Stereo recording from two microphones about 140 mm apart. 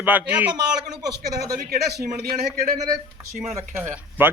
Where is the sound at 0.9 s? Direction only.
25° right (ahead or behind).